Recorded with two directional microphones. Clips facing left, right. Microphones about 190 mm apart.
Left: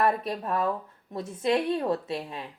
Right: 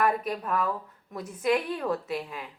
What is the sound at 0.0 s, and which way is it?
A woman's voice, 30° left (ahead or behind).